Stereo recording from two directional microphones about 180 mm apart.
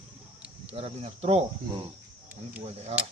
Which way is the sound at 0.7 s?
35° right (ahead or behind).